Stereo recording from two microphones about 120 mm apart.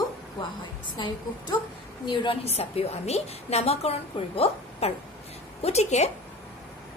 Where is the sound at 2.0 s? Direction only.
50° left (ahead or behind); by 6.1 s 70° left (ahead or behind).